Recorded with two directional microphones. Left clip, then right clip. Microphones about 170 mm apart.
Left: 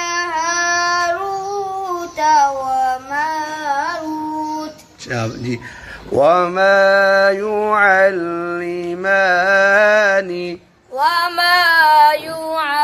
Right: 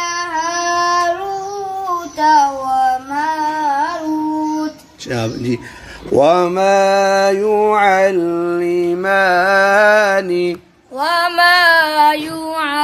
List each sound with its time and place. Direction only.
0.0 s child singing: 15° right (ahead or behind)
5.1 s mantra: 35° right (ahead or behind)
8.5 s mantra: 5° left (ahead or behind)
11.0 s female singing: 55° left (ahead or behind)